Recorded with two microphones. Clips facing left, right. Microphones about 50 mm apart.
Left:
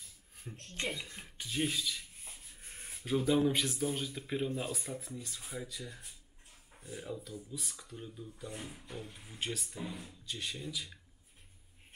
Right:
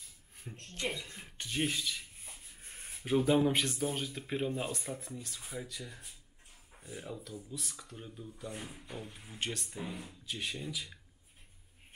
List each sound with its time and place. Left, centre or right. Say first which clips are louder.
0.5 s speech: right 1 dB; centre
1.7 s rub: even; centre
2.6 s a sound: even; centre
3.0 s speech: right 2 dB; centre
9.7 s speech: right 1 dB; centre